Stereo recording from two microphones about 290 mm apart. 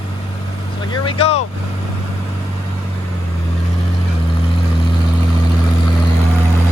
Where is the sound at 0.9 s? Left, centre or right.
Centre.